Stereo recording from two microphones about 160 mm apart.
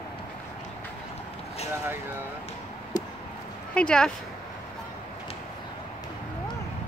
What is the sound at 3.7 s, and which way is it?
Speech, 5° left (ahead or behind).